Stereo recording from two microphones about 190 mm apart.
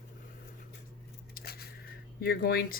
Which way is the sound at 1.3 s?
55° left (ahead or behind).